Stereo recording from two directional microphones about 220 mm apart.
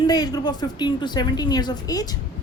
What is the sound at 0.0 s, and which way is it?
A woman's voice, 20° left (ahead or behind).